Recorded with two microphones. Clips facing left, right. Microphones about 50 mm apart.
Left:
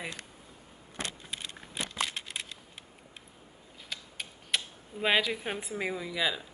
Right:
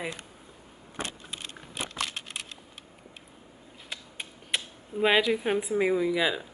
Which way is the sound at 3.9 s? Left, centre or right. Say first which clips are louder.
Right 1 dB; right.